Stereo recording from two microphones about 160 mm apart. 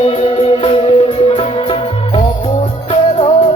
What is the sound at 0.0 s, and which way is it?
Music, 35° left (ahead or behind).